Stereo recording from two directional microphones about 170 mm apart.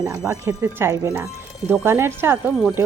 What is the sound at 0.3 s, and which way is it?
Speech, 15° right (ahead or behind).